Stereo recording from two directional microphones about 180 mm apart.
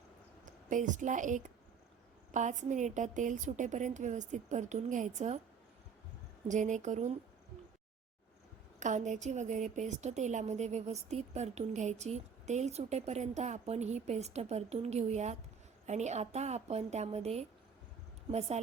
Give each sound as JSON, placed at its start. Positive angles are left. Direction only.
{"t": 0.4, "sound": "a woman's voice", "side_deg": -45}
{"t": 6.5, "sound": "a woman's voice", "side_deg": -45}
{"t": 8.8, "sound": "a woman's voice", "side_deg": -45}